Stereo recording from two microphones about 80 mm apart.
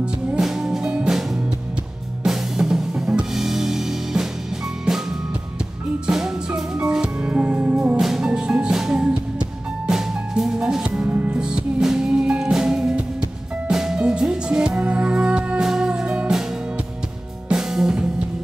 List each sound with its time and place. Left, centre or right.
0.4 s music: centre
6.0 s music: centre
8.0 s music: centre
11.1 s music: right
11.3 s music: centre
17.5 s music: centre